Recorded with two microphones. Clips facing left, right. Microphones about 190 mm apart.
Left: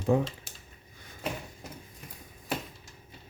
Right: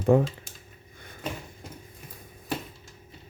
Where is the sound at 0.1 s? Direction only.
60° right (ahead or behind).